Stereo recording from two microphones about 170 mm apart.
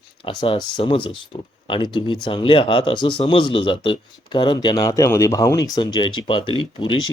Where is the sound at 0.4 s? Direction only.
30° left (ahead or behind).